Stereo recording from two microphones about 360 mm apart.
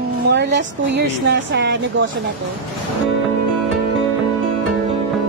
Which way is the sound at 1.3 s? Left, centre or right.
Right.